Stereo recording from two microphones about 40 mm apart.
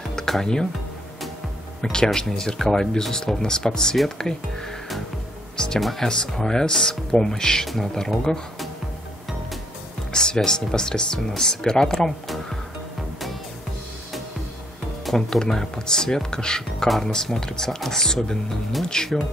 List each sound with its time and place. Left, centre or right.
1.8 s speech: centre
5.8 s speech: centre
6.0 s speech: centre
10.1 s speech: centre
15.0 s speech: centre